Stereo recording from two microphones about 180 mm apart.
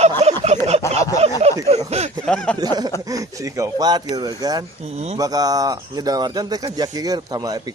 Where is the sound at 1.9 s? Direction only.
35° right (ahead or behind).